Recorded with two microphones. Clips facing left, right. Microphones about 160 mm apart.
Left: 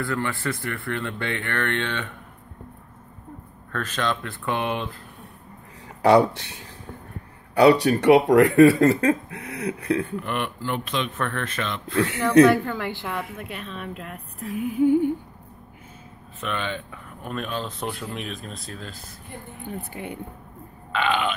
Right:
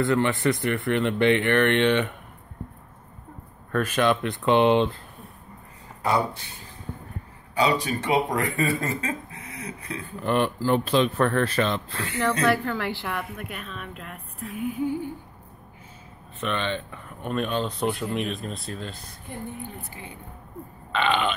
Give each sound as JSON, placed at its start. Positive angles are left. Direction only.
{"t": 0.0, "sound": "speech", "side_deg": -20}
{"t": 3.7, "sound": "speech", "side_deg": -10}
{"t": 6.0, "sound": "speech", "side_deg": 75}
{"t": 7.5, "sound": "speech", "side_deg": 65}
{"t": 10.2, "sound": "speech", "side_deg": -35}
{"t": 12.4, "sound": "a woman's voice", "side_deg": 20}
{"t": 13.5, "sound": "a woman's voice", "side_deg": 35}
{"t": 14.7, "sound": "humming", "side_deg": 55}
{"t": 16.3, "sound": "speech", "side_deg": 5}
{"t": 19.8, "sound": "speech", "side_deg": 60}
{"t": 20.9, "sound": "speech", "side_deg": 5}